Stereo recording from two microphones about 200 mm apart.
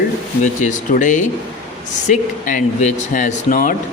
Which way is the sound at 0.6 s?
40° left (ahead or behind).